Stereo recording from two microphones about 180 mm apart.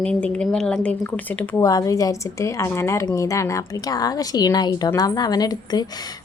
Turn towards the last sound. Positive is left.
turn(degrees=20)  # may be behind; listen again after turning